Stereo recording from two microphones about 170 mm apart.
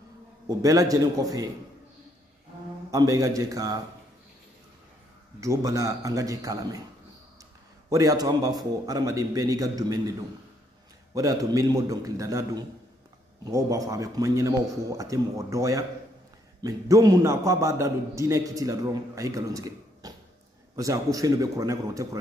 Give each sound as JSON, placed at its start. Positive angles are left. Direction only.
{"t": 0.6, "sound": "a man's voice", "side_deg": -20}
{"t": 2.9, "sound": "a man's voice", "side_deg": -20}
{"t": 5.4, "sound": "a man's voice", "side_deg": -20}
{"t": 7.9, "sound": "a man's voice", "side_deg": -20}
{"t": 11.1, "sound": "a man's voice", "side_deg": -20}